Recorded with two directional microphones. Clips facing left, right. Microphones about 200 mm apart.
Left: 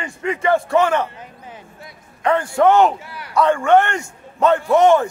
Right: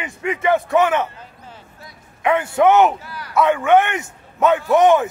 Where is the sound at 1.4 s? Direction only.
15° left (ahead or behind).